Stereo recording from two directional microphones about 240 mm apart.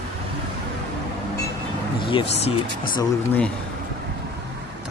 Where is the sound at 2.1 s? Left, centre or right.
Left.